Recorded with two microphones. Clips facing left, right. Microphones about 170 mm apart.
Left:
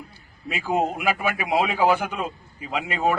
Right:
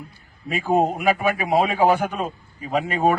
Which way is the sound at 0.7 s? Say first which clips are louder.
Right 4 dB; 40° right (ahead or behind).